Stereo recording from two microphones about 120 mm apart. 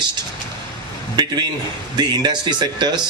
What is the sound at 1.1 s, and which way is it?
Speech, 35° right (ahead or behind).